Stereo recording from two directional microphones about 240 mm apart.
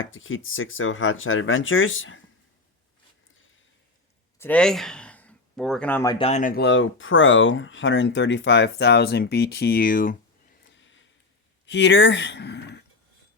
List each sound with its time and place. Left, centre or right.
0.0 s speech: left
4.4 s speech: centre
6.1 s speech: left
10.6 s a sound: left
11.6 s speech: left